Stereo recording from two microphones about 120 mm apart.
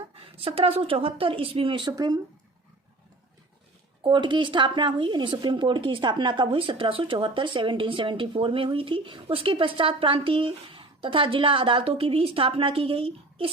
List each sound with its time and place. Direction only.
0.1 s speech: 50° right (ahead or behind)
1.9 s speech: 30° right (ahead or behind)
4.0 s speech: 40° right (ahead or behind)